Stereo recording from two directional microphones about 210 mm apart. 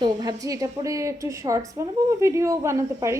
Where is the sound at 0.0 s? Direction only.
20° right (ahead or behind).